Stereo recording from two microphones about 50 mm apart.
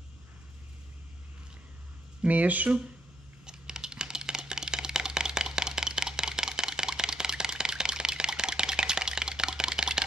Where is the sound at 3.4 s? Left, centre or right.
Centre.